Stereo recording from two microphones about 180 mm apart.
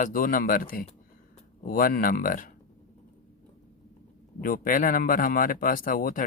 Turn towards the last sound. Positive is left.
turn(degrees=50)  # may be behind; listen again after turning